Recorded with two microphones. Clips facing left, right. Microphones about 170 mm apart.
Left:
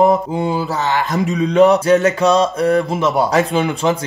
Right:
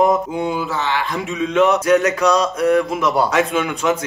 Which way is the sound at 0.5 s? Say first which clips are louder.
Left 2 dB; 35° left (ahead or behind).